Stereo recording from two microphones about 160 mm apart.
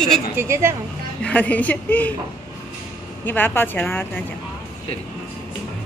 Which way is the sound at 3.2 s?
10° left (ahead or behind).